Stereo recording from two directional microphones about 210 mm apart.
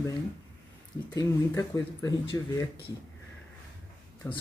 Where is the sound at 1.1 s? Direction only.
15° left (ahead or behind).